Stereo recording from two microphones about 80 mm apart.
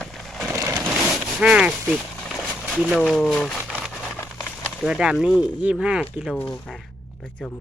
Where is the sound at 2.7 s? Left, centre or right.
Centre.